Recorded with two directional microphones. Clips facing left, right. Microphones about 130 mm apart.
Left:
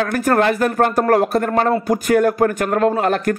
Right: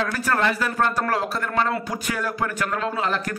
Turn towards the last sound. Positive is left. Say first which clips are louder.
# left 8 dB
turn(degrees=50)  # may be behind; listen again after turning